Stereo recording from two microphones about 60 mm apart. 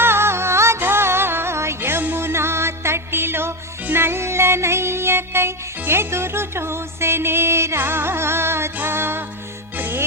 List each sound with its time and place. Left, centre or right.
0.0 s music: right
2.2 s music: right